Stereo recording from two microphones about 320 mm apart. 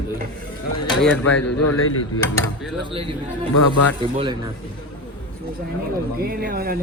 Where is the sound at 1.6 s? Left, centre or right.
Left.